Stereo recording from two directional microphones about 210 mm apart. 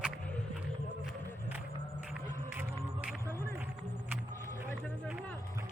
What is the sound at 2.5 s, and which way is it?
Music, 5° right (ahead or behind).